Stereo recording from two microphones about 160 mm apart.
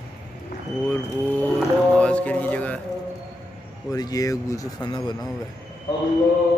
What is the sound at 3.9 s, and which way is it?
Speech, 25° left (ahead or behind).